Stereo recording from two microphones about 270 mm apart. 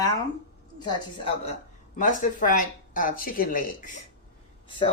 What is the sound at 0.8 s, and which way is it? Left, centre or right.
Speech, centre.